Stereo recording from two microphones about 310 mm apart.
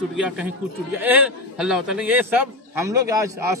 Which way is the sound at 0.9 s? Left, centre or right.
Centre.